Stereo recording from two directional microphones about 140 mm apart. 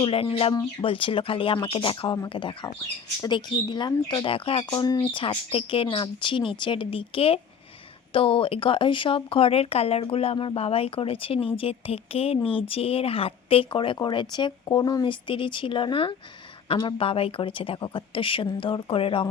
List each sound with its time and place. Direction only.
0.0 s speech: 40° left (ahead or behind)
5.1 s speech: 40° left (ahead or behind)